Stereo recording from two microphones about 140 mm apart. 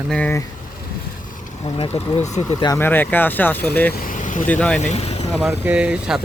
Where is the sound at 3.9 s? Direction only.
70° left (ahead or behind).